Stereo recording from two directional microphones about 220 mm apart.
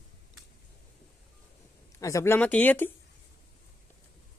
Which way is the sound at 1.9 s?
15° left (ahead or behind).